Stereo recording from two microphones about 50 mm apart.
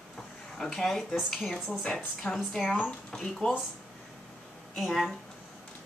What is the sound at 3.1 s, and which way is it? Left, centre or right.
Speech, centre.